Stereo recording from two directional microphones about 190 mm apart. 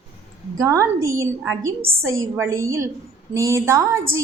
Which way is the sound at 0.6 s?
15° right (ahead or behind).